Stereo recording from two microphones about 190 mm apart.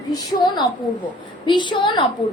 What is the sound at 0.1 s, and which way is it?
A woman's voice, 20° left (ahead or behind).